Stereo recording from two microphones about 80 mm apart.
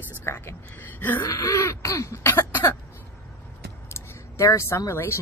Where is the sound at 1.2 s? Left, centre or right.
Left.